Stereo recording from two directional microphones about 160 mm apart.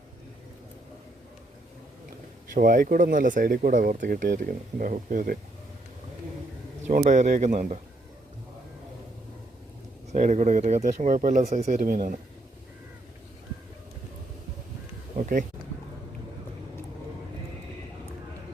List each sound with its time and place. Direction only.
2.6 s speech: 60° right (ahead or behind)
6.8 s speech: 50° right (ahead or behind)
10.1 s speech: 50° right (ahead or behind)